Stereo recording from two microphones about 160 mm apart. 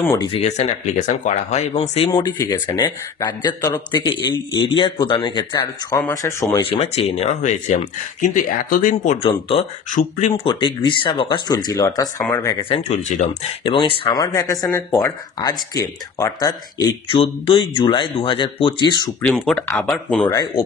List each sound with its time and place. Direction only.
0.2 s speech: 40° left (ahead or behind)
2.3 s speech: 15° left (ahead or behind)
6.6 s speech: 35° left (ahead or behind)
10.4 s speech: 30° left (ahead or behind)
12.6 s speech: 40° left (ahead or behind)
13.3 s speech: 30° left (ahead or behind)
19.2 s speech: 5° left (ahead or behind)
20.2 s speech: 20° left (ahead or behind)